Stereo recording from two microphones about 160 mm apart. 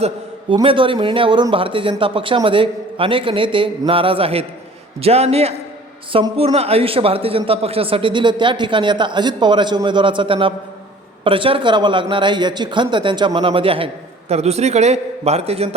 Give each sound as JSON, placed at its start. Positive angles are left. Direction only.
{"t": 0.5, "sound": "speech", "side_deg": -35}